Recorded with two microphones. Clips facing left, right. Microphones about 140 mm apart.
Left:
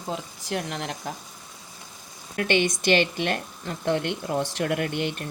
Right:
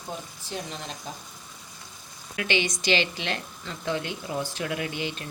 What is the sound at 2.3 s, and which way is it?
A woman's voice, 50° left (ahead or behind).